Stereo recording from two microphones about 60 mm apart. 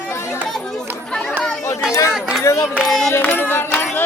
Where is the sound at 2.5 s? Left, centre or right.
Left.